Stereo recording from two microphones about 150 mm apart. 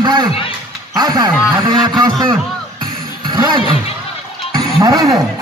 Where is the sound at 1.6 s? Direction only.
30° right (ahead or behind).